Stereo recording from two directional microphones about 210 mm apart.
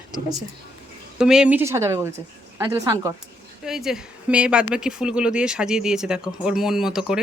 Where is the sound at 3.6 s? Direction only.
Centre (ahead or behind).